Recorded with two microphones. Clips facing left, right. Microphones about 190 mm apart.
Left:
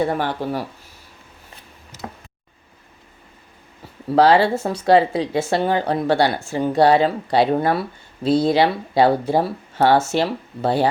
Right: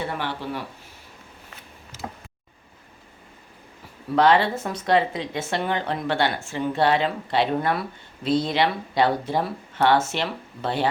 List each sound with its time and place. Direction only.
0.0 s speech: 45° left (ahead or behind)
4.1 s speech: 35° left (ahead or behind)